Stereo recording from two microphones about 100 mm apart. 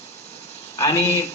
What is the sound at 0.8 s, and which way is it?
Speech, 45° left (ahead or behind).